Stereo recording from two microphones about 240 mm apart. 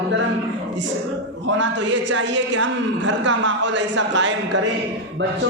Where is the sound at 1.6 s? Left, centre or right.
Right.